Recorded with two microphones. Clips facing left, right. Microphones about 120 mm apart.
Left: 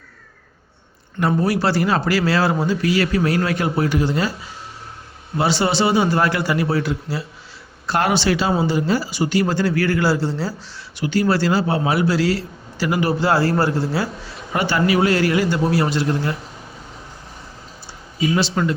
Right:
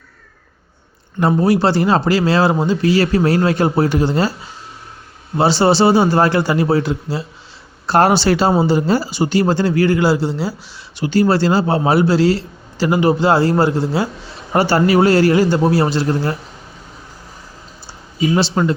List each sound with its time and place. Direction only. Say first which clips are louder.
1.2 s a man's voice: right 5 dB; 25° right (ahead or behind)
5.4 s a man's voice: right 6 dB; 30° right (ahead or behind); by 10.5 s 15° right (ahead or behind)
10.9 s a man's voice: right 4 dB; 30° right (ahead or behind)
14.5 s a man's voice: right 5 dB; 35° right (ahead or behind)
18.3 s a man's voice: right 4 dB; 30° right (ahead or behind)